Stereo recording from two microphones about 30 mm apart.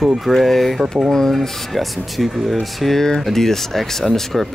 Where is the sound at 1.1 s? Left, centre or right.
Centre.